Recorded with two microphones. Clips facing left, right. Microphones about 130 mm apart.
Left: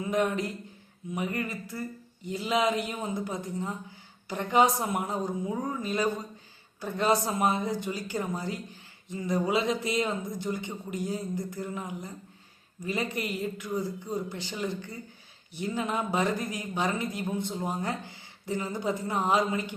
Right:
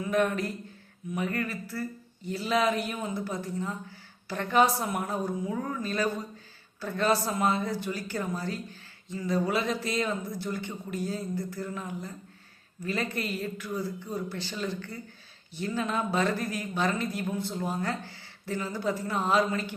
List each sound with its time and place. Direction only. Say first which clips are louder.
0.0 s a man's voice: right 1 dB; 20° left (ahead or behind)